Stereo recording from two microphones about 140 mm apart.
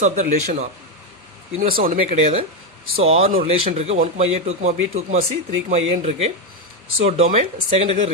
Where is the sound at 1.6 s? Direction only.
85° right.